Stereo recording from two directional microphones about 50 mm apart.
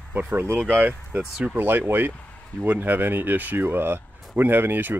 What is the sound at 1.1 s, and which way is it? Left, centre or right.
Speech, right.